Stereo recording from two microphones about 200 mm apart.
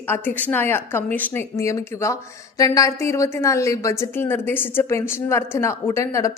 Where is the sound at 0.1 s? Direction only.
10° left (ahead or behind).